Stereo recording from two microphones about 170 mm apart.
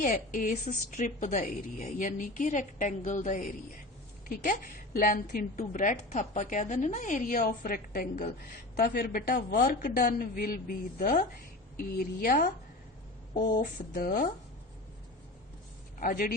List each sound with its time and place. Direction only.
0.0 s a woman's voice: 55° left (ahead or behind)
13.6 s a woman's voice: 55° left (ahead or behind)
16.0 s a man's voice: 55° left (ahead or behind)